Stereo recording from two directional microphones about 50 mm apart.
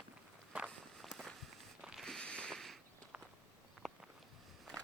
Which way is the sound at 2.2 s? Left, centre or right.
Left.